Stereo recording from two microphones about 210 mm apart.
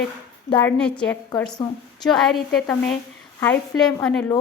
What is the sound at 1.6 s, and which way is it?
Speech, 25° left (ahead or behind).